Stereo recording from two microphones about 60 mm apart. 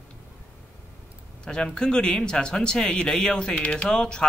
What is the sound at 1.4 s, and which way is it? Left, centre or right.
A man's voice, centre.